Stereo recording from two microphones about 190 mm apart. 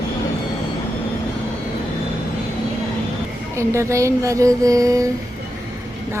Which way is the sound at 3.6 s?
15° right (ahead or behind).